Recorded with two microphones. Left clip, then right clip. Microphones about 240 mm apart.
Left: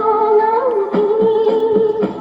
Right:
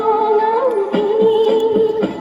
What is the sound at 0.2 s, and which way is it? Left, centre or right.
Music, right.